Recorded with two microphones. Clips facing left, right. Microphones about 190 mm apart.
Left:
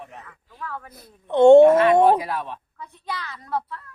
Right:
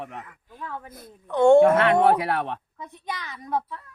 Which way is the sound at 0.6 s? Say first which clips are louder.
Left 1 dB; 20° right (ahead or behind).